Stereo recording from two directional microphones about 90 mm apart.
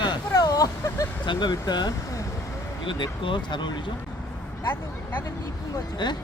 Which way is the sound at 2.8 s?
65° left (ahead or behind).